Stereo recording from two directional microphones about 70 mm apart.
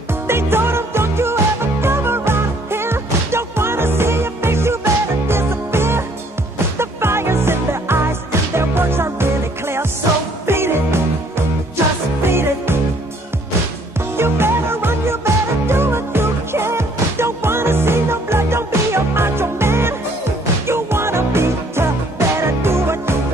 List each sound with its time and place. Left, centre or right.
0.1 s music: right
14.1 s music: right